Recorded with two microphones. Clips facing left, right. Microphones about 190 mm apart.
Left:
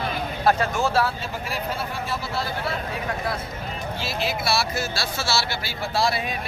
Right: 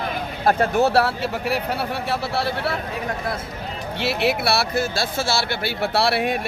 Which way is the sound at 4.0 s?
65° right (ahead or behind).